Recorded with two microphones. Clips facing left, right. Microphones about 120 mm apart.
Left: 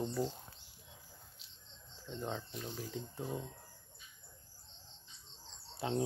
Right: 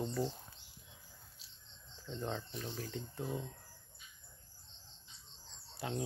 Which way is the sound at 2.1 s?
10° left (ahead or behind).